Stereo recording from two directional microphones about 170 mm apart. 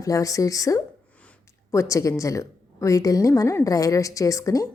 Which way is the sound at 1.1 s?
10° left (ahead or behind).